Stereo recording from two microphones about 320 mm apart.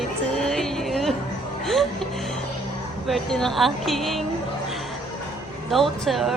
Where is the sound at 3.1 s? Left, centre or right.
Centre.